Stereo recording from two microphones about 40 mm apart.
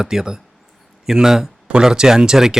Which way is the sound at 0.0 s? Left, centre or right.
Centre.